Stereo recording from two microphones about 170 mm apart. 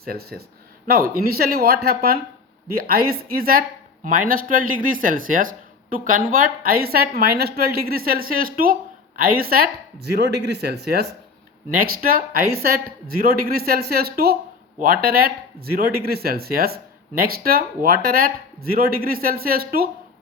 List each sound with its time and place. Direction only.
0.0 s speech: 65° right (ahead or behind)
11.8 s speech: 60° right (ahead or behind)